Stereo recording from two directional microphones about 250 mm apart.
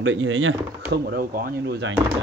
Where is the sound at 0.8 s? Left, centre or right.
Right.